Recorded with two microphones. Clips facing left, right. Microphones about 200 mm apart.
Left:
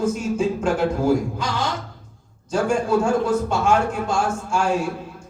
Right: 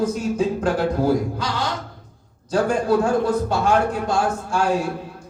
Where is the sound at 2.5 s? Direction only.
35° right (ahead or behind).